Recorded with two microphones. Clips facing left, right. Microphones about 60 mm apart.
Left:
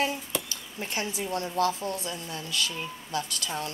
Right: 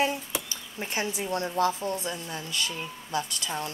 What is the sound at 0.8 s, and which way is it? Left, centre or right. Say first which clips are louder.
Speech: right 2 dB; right.